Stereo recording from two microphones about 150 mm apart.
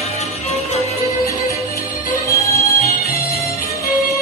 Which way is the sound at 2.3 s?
20° left (ahead or behind).